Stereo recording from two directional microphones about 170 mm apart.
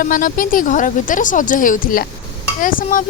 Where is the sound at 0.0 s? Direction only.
55° left (ahead or behind).